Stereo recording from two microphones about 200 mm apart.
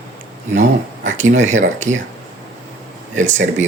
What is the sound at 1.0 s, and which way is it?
Speech, 40° right (ahead or behind).